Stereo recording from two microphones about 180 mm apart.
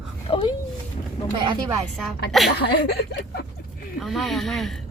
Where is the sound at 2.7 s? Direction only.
65° left (ahead or behind).